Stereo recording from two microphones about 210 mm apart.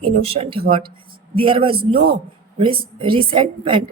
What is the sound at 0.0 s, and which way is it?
A woman's voice, 30° right (ahead or behind).